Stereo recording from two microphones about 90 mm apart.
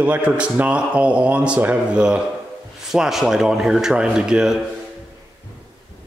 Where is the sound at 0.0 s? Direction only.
15° right (ahead or behind).